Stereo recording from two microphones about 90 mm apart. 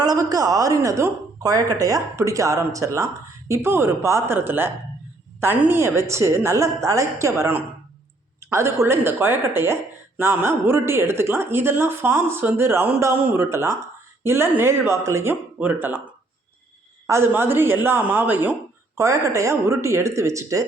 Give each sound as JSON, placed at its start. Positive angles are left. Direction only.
{"t": 0.0, "sound": "a woman's voice", "side_deg": -45}
{"t": 17.1, "sound": "a woman's voice", "side_deg": -30}
{"t": 18.9, "sound": "speech", "side_deg": -35}